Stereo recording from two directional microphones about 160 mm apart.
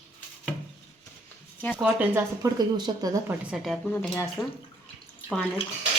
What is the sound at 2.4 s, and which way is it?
Speech, 25° right (ahead or behind).